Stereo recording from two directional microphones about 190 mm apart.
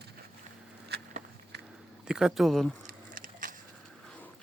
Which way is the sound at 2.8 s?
45° right (ahead or behind).